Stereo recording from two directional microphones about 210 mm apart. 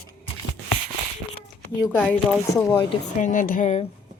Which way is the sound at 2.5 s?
15° left (ahead or behind).